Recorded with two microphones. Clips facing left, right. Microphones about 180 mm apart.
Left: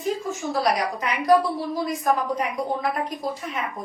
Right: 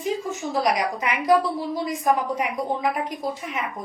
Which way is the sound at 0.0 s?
15° right (ahead or behind).